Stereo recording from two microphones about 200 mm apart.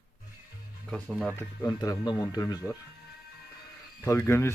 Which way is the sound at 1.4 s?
15° left (ahead or behind).